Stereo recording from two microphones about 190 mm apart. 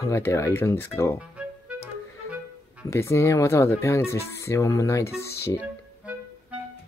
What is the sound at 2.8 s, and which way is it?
Speech, 15° left (ahead or behind).